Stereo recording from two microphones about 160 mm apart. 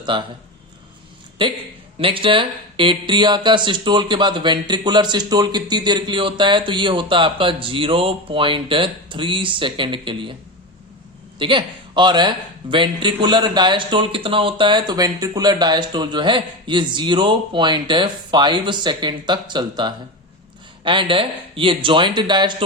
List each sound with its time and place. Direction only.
0.0 s speech: 30° right (ahead or behind)
1.4 s speech: 30° right (ahead or behind)
11.3 s a man's voice: 30° right (ahead or behind)